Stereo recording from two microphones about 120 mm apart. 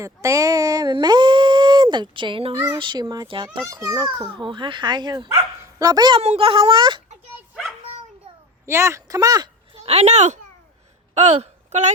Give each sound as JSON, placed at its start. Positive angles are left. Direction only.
{"t": 0.0, "sound": "speech", "side_deg": -25}
{"t": 3.6, "sound": "speech", "side_deg": -30}
{"t": 4.3, "sound": "speech", "side_deg": -45}
{"t": 6.1, "sound": "a child's voice", "side_deg": -55}
{"t": 8.6, "sound": "speech", "side_deg": -20}
{"t": 9.7, "sound": "a woman's voice", "side_deg": -60}
{"t": 11.1, "sound": "a sound", "side_deg": -65}